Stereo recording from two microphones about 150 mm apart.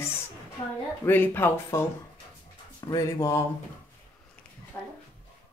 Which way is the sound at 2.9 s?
20° left (ahead or behind).